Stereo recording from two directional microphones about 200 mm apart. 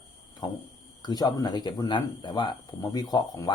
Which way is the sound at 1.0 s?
20° left (ahead or behind).